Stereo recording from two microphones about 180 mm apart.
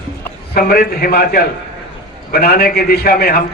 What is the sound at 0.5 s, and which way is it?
A man's voice, 60° left (ahead or behind).